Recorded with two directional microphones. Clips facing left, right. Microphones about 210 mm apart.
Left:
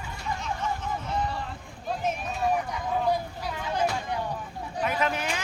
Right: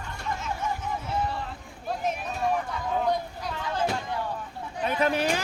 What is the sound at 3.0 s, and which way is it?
Vehicle, 10° left (ahead or behind).